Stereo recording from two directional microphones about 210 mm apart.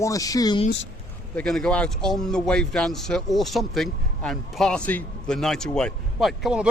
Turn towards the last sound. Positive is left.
turn(degrees=0)  # may be behind; listen again after turning